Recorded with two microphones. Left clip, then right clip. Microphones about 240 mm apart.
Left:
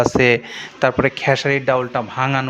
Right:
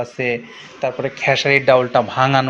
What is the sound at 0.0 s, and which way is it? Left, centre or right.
A man's voice, left.